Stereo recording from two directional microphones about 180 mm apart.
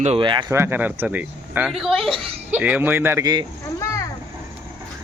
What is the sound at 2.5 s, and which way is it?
Speech, 10° right (ahead or behind).